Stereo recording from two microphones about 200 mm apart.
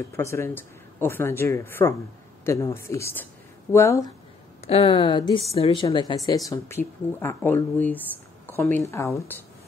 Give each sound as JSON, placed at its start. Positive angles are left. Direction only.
{"t": 0.1, "sound": "speech", "side_deg": 15}
{"t": 4.6, "sound": "speech", "side_deg": 30}